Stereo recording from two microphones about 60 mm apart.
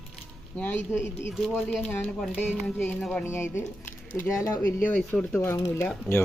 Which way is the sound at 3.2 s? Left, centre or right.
Left.